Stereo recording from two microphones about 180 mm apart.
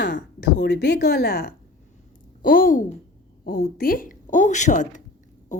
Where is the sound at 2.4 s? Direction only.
50° left (ahead or behind).